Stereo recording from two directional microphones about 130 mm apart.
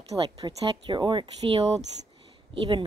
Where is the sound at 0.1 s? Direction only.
25° right (ahead or behind).